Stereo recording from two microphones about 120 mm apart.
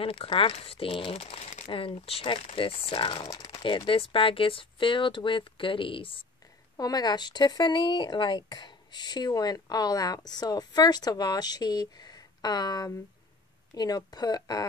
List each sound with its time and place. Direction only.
0.0 s speech: 50° left (ahead or behind)
3.3 s speech: 30° left (ahead or behind)
3.6 s speech: 45° left (ahead or behind)
6.8 s speech: 35° left (ahead or behind)